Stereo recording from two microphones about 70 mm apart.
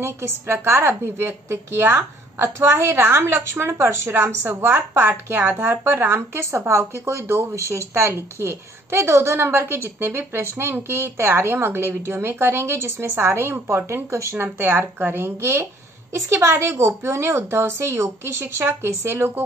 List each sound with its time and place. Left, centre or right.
0.0 s speech: right
5.4 s speech: centre
5.7 s speech: right